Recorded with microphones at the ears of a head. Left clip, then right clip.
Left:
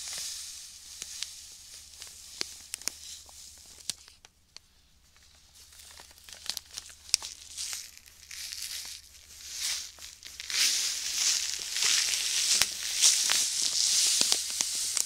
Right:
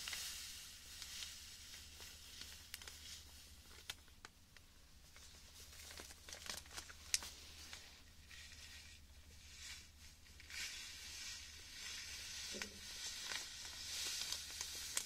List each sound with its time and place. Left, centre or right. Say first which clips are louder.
0.0 s sizzle: left 9 dB; left
6.3 s crumpling: left 12 dB; left